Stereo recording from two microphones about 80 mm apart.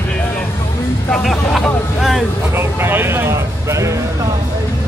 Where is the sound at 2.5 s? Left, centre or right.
Right.